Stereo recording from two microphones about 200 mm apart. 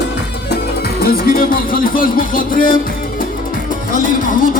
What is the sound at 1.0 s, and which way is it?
Speech, 45° left (ahead or behind).